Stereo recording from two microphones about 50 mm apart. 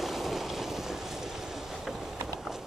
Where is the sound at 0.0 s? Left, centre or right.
Centre.